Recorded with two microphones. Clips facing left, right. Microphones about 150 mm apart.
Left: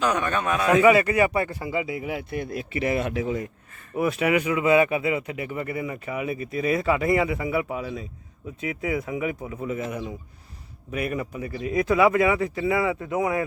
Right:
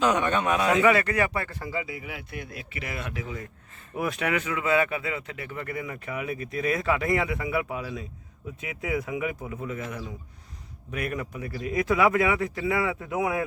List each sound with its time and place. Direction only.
0.0 s a man's voice: 20° right (ahead or behind)
0.7 s a man's voice: 10° left (ahead or behind)
2.0 s speech: 35° left (ahead or behind)
3.9 s speech: centre (ahead or behind)
10.9 s speech: 5° left (ahead or behind)